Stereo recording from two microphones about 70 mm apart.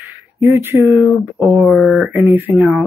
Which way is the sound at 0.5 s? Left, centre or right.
Right.